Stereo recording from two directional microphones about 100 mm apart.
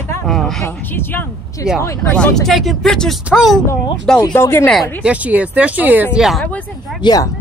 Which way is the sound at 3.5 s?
5° left (ahead or behind).